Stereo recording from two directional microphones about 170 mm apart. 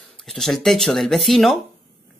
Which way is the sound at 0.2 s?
Centre (ahead or behind).